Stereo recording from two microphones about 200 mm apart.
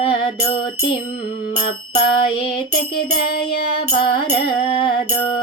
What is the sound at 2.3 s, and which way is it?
Music, 30° left (ahead or behind).